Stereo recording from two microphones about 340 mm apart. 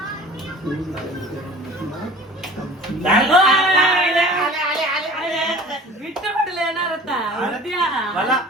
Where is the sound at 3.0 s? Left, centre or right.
Centre.